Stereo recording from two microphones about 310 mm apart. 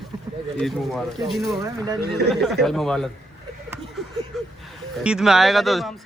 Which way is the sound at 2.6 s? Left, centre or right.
Centre.